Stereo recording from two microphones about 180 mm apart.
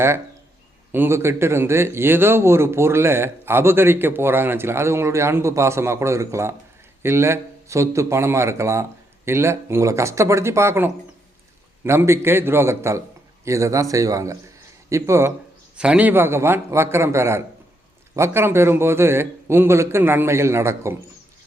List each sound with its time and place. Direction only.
0.9 s speech: 15° right (ahead or behind)